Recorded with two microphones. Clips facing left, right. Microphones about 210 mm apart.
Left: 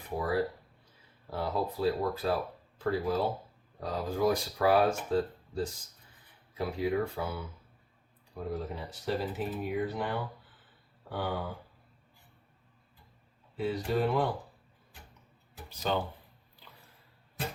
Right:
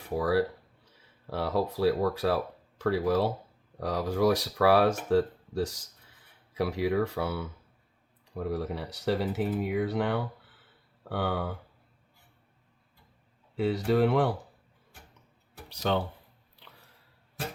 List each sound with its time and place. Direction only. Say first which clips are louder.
0.2 s speech: right 4 dB; 80° right
13.6 s speech: right 5 dB; 70° right (ahead or behind)
15.7 s speech: right 3 dB; 70° right (ahead or behind)